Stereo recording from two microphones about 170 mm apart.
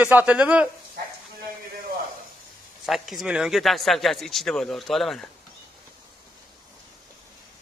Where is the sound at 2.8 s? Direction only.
Centre (ahead or behind).